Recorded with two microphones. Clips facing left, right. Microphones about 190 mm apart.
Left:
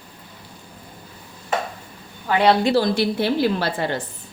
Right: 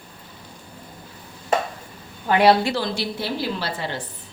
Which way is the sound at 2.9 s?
55° left (ahead or behind).